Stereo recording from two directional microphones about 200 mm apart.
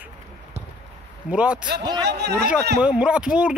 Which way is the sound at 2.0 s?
55° right (ahead or behind).